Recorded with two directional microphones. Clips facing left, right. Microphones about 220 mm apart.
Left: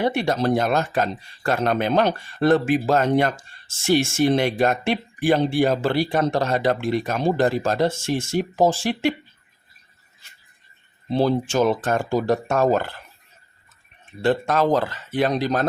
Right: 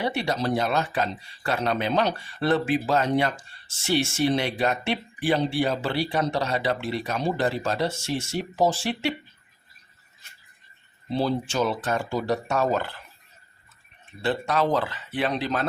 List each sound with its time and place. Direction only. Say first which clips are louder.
0.0 s speech: left 5 dB; 50° left (ahead or behind)
11.1 s speech: left 5 dB; 50° left (ahead or behind)
14.2 s speech: left 5 dB; 45° left (ahead or behind)